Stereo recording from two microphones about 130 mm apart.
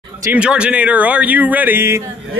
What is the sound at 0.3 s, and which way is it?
Speech, 10° right (ahead or behind).